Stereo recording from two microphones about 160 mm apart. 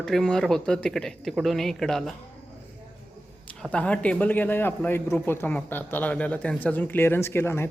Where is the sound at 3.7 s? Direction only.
10° left (ahead or behind).